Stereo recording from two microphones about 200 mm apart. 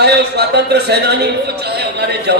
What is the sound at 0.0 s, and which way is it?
Speech, 55° right (ahead or behind).